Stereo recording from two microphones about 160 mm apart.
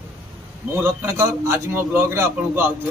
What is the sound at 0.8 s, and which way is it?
A man's voice, 15° right (ahead or behind).